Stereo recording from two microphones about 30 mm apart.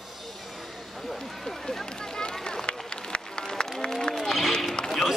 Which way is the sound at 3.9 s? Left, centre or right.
Centre.